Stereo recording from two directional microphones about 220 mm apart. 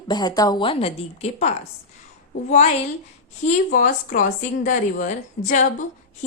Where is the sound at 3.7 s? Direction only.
40° left (ahead or behind).